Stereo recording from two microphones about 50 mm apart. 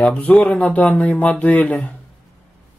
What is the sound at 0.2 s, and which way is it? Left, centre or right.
Speech, left.